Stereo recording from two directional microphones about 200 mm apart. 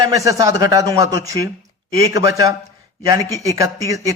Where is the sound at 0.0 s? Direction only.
15° right (ahead or behind).